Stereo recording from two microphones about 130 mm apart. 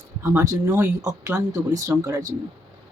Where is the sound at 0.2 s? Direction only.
20° right (ahead or behind).